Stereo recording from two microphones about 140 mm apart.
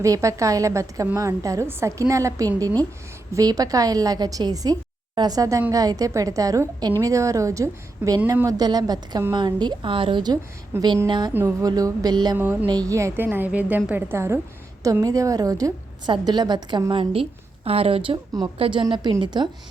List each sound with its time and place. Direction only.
0.0 s a woman's voice: 20° right (ahead or behind)
10.8 s a woman's voice: 25° right (ahead or behind)
11.7 s a woman's voice: 30° right (ahead or behind)